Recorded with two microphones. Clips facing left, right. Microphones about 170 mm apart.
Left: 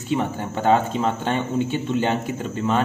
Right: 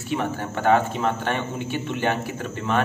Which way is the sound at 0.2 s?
15° left (ahead or behind).